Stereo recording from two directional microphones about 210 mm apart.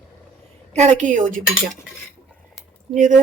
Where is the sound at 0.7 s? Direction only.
35° right (ahead or behind).